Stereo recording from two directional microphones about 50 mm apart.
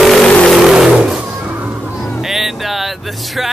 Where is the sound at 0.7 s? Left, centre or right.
Centre.